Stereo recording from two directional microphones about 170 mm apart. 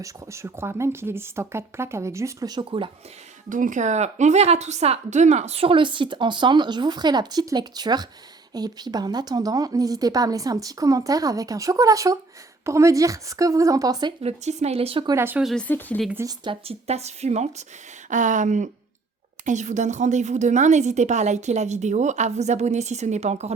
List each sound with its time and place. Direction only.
0.0 s speech: 15° right (ahead or behind)
3.5 s a woman's voice: 50° right (ahead or behind); by 14.1 s 20° right (ahead or behind)
14.2 s speech: 40° right (ahead or behind)
15.1 s speech: 10° right (ahead or behind)
15.4 s speech: 5° left (ahead or behind)
16.2 s a woman's voice: 30° right (ahead or behind)